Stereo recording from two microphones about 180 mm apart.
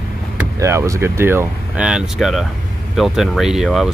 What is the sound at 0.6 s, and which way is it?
Speech, 15° right (ahead or behind).